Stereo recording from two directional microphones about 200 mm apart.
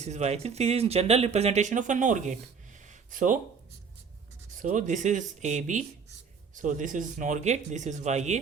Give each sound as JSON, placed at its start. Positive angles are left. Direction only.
{"t": 0.0, "sound": "speech", "side_deg": -35}
{"t": 2.8, "sound": "a sound", "side_deg": -40}
{"t": 4.5, "sound": "speech", "side_deg": -40}